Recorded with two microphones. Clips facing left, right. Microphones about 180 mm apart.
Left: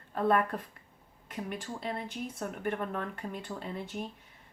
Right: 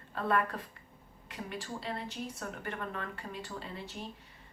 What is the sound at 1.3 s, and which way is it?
Speech, 50° left (ahead or behind).